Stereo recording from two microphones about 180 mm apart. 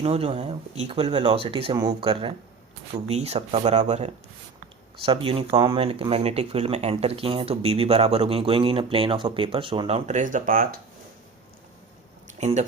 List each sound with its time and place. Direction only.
0.0 s speech: 30° right (ahead or behind)
1.1 s speech: 25° right (ahead or behind); by 10.8 s 50° right (ahead or behind)
12.4 s speech: 40° right (ahead or behind)